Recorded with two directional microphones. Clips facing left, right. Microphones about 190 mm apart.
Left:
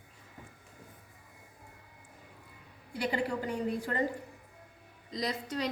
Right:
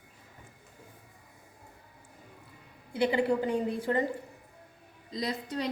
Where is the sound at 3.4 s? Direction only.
25° right (ahead or behind).